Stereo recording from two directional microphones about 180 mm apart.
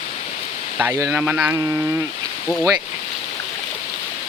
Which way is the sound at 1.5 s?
15° right (ahead or behind).